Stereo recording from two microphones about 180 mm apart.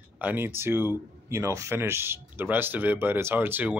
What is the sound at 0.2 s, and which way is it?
Speech, 10° right (ahead or behind).